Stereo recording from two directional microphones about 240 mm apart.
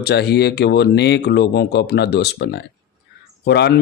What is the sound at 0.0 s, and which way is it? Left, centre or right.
Speech, left.